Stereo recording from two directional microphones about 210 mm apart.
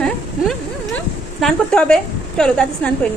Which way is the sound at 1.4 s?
5° left (ahead or behind).